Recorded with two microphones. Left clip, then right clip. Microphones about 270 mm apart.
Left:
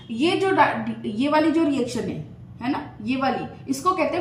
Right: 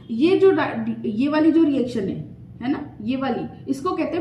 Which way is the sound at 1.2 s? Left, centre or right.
Centre.